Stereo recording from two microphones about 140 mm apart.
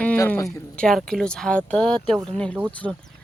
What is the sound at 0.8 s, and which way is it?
Speech, 5° left (ahead or behind).